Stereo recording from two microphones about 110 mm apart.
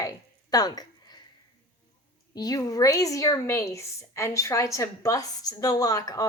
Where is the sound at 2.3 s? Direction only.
35° left (ahead or behind).